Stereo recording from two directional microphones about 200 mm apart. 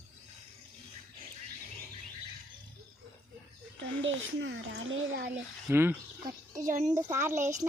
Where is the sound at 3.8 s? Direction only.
70° right (ahead or behind).